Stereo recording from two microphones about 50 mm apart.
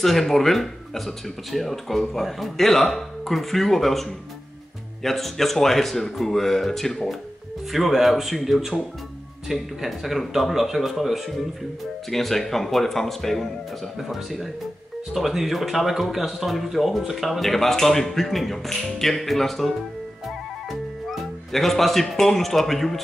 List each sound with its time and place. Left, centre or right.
0.0 s speech: centre
7.7 s speech: centre
21.1 s speech: centre